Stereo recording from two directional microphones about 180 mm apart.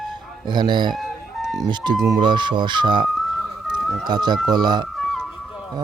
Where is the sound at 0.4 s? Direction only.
25° right (ahead or behind).